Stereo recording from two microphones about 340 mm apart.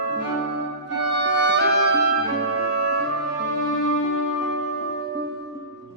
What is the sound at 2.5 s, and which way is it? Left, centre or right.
Music, right.